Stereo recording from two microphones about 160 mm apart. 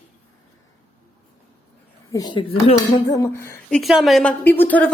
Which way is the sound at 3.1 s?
15° left (ahead or behind).